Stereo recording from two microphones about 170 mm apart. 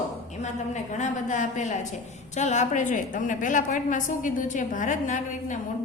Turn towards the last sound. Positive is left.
turn(degrees=50)  # may be behind; listen again after turning